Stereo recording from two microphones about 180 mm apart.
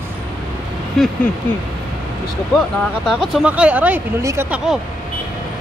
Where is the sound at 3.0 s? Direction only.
Centre (ahead or behind).